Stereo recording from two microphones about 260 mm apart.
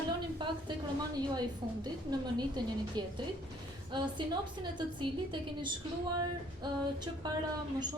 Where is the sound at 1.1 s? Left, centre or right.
Centre.